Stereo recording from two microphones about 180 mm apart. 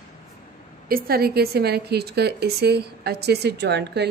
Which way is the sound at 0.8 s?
55° right (ahead or behind).